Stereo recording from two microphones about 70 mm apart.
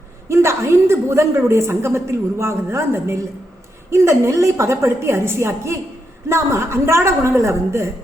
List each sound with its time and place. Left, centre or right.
0.3 s a woman's voice: right